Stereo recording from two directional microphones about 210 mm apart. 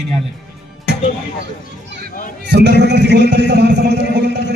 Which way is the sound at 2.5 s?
55° right (ahead or behind).